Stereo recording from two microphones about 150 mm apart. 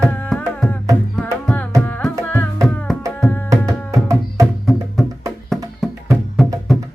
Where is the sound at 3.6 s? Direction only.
20° right (ahead or behind).